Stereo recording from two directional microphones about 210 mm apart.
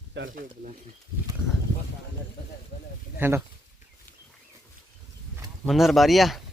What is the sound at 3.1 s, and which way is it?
Speech, 10° right (ahead or behind).